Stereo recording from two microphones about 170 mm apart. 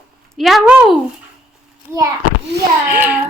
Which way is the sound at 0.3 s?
Centre (ahead or behind).